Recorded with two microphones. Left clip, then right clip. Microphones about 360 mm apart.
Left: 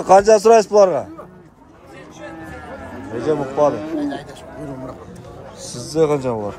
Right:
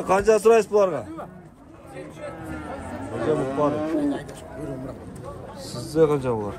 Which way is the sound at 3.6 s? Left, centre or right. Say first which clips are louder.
Left 5 dB; left.